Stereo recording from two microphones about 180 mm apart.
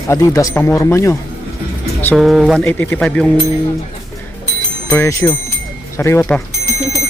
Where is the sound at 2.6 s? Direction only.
10° left (ahead or behind).